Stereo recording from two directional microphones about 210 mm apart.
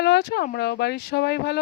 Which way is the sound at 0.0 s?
55° left (ahead or behind).